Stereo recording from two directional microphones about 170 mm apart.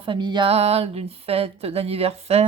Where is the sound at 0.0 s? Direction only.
30° right (ahead or behind).